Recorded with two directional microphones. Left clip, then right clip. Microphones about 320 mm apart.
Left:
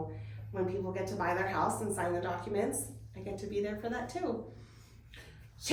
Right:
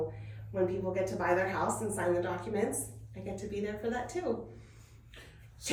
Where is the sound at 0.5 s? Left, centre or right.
Centre.